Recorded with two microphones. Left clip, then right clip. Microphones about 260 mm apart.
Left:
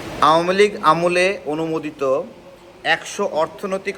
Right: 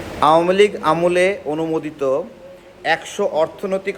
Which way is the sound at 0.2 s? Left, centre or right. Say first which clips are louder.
Right 1 dB; centre.